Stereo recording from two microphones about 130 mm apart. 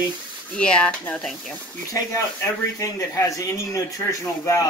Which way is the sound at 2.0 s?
25° left (ahead or behind).